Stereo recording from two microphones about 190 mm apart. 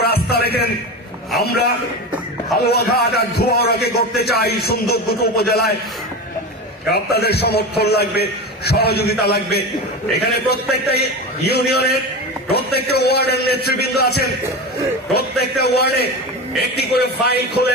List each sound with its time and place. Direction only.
0.0 s a sound: 55° left (ahead or behind)
1.4 s a man's voice: 55° left (ahead or behind)
6.9 s a man's voice: 55° left (ahead or behind)